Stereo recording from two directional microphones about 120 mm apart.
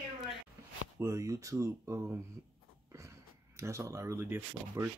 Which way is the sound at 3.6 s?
25° right (ahead or behind).